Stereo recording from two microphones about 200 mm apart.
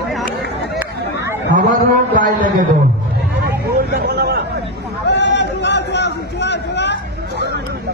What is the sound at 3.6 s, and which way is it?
Vehicle, 50° right (ahead or behind).